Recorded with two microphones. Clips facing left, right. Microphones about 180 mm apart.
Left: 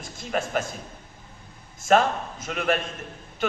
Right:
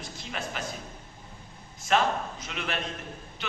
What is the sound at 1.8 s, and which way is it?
Speech, 45° left (ahead or behind).